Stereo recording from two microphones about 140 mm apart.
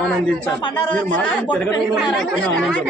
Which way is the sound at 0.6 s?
35° left (ahead or behind).